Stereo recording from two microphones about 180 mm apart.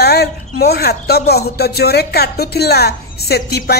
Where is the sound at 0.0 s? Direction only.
65° left (ahead or behind).